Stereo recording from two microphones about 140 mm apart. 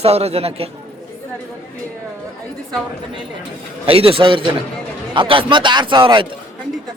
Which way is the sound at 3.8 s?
40° right (ahead or behind).